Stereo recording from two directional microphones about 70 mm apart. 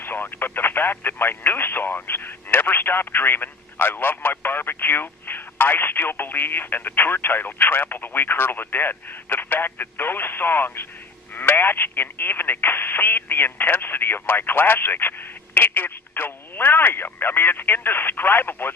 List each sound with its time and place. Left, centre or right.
0.0 s speech: left